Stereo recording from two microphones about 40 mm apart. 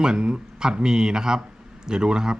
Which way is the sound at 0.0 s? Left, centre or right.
Right.